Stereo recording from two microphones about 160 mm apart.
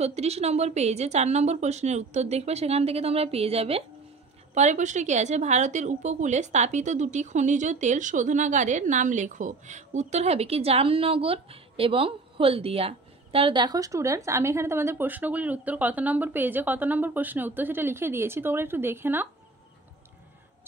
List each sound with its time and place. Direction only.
0.0 s a woman's voice: 40° right (ahead or behind); by 19.2 s 15° right (ahead or behind)